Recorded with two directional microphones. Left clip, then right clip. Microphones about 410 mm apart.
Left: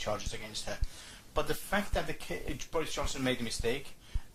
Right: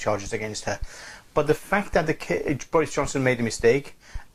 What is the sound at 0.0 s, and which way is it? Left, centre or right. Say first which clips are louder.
A man's voice: right 11 dB; right.